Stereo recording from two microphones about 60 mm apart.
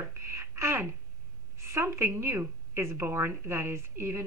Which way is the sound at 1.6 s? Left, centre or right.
Right.